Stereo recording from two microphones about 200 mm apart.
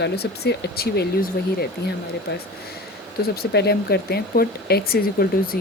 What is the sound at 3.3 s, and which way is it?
Speech, 55° left (ahead or behind).